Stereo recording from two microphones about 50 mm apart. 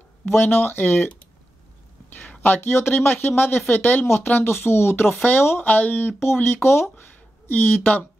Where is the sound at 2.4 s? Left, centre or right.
Left.